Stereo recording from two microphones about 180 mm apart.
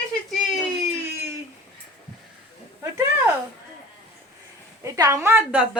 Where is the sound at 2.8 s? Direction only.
10° right (ahead or behind).